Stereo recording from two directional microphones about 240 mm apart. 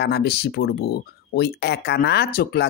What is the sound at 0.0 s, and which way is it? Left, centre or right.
Speech, left.